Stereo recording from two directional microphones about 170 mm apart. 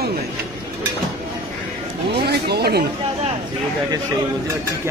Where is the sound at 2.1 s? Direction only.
70° right (ahead or behind).